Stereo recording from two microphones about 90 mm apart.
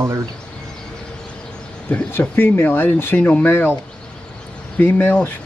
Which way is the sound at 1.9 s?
20° left (ahead or behind).